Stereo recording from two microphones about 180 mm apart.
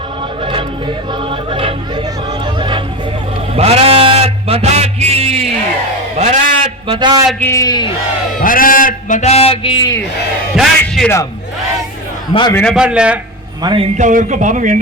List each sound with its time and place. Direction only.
2.6 s music: 25° right (ahead or behind)
6.1 s a man's voice: 40° right (ahead or behind)
6.8 s a man's voice: 30° right (ahead or behind)
7.3 s a man's voice: 15° left (ahead or behind)
8.4 s a man's voice: 50° left (ahead or behind); by 10.0 s 25° left (ahead or behind)
10.5 s a man's voice: centre (ahead or behind)
12.3 s a man's voice: 25° left (ahead or behind)
12.7 s a man's voice: 5° right (ahead or behind)
13.6 s a man's voice: 25° right (ahead or behind)
14.0 s a man's voice: 45° right (ahead or behind)